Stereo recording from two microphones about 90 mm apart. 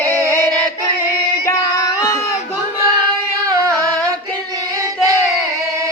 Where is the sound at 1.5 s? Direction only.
40° left (ahead or behind).